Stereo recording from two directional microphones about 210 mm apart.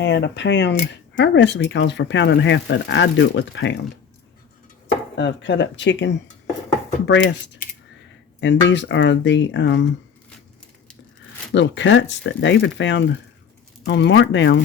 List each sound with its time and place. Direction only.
0.0 s speech: 55° left (ahead or behind)
5.1 s speech: 60° left (ahead or behind)
8.7 s speech: 60° left (ahead or behind)
11.5 s speech: 60° left (ahead or behind)